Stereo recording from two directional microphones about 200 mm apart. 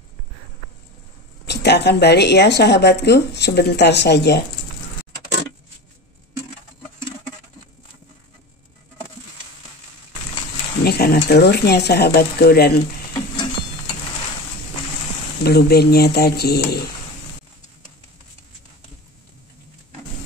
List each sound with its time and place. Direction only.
1.4 s speech: 55° left (ahead or behind)
10.8 s a sound: 50° left (ahead or behind)
11.2 s speech: 55° left (ahead or behind)
15.4 s speech: 50° left (ahead or behind)